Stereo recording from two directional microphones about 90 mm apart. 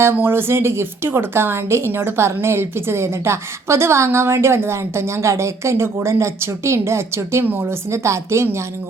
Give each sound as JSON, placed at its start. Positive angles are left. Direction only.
{"t": 0.0, "sound": "a woman's voice", "side_deg": -25}